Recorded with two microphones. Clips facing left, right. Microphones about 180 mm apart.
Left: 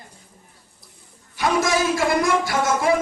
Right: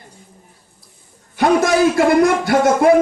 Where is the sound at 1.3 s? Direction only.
60° right (ahead or behind).